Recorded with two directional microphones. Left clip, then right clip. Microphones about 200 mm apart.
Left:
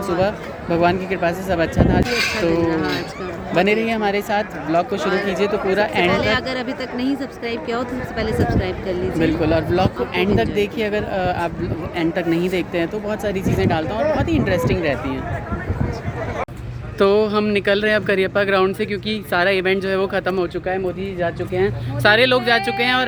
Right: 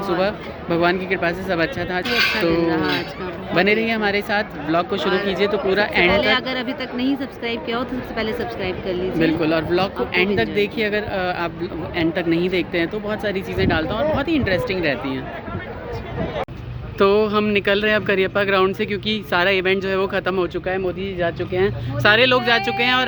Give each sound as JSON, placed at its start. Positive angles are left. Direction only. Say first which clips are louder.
{"t": 0.2, "sound": "speech", "louder": "left 1 dB", "side_deg": 15}
{"t": 2.0, "sound": "speech", "louder": "right 2 dB", "side_deg": -30}
{"t": 3.5, "sound": "speech", "louder": "even", "side_deg": 15}
{"t": 6.1, "sound": "speech", "louder": "right 1 dB", "side_deg": -10}
{"t": 9.1, "sound": "speech", "louder": "left 1 dB", "side_deg": 15}
{"t": 17.0, "sound": "speech", "louder": "even", "side_deg": 10}